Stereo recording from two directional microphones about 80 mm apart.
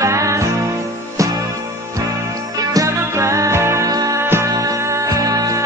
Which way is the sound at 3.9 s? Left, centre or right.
Right.